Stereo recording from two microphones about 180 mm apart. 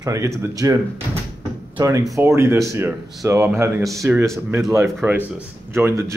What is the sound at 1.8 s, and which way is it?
Speech, 15° right (ahead or behind).